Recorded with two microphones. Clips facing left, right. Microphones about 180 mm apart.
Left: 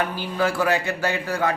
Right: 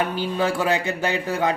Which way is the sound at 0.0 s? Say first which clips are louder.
Right 1 dB; 20° right (ahead or behind).